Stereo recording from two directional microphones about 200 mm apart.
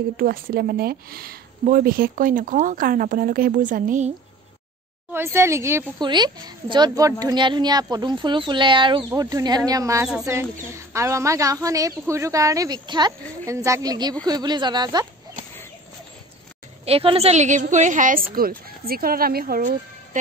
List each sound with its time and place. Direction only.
0.2 s speech: 45° right (ahead or behind)
5.1 s a woman's voice: 10° right (ahead or behind)
16.8 s a woman's voice: 30° right (ahead or behind); by 20.2 s 45° right (ahead or behind)